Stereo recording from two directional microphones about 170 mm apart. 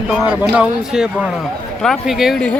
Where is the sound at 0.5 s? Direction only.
5° right (ahead or behind).